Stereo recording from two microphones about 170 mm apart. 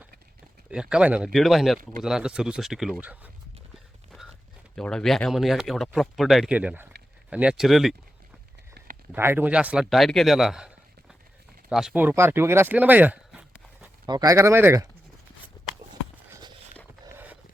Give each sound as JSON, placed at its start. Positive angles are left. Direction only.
{"t": 0.7, "sound": "speech", "side_deg": -5}
{"t": 4.7, "sound": "speech", "side_deg": 5}
{"t": 9.1, "sound": "speech", "side_deg": -15}
{"t": 11.7, "sound": "speech", "side_deg": -5}
{"t": 14.1, "sound": "speech", "side_deg": -20}